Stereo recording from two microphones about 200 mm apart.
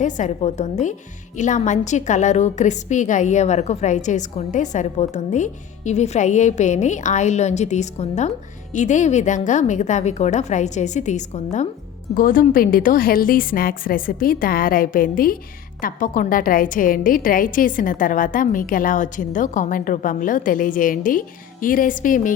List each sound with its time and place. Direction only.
0.0 s a woman's voice: 35° left (ahead or behind)